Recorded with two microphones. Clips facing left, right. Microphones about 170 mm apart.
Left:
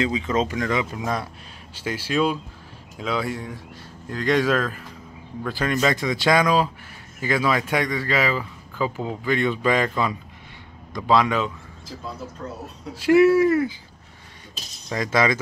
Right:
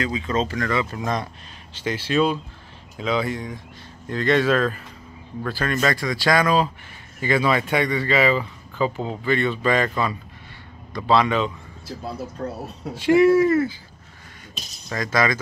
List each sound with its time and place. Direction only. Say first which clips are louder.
0.0 s speech: left 1 dB; 15° left (ahead or behind)
5.5 s speech: left 1 dB; 15° left (ahead or behind)
9.8 s speech: even; centre (ahead or behind)
12.4 s speech: right 6 dB; 60° right (ahead or behind)
12.9 s speech: even; 5° left (ahead or behind)
14.9 s speech: left 1 dB; 20° left (ahead or behind)